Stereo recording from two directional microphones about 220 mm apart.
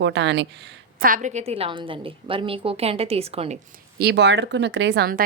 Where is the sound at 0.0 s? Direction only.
55° right (ahead or behind).